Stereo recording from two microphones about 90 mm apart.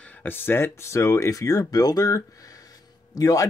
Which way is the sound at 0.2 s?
25° left (ahead or behind).